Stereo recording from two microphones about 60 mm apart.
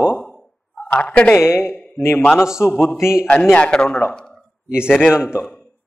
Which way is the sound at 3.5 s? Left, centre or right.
Centre.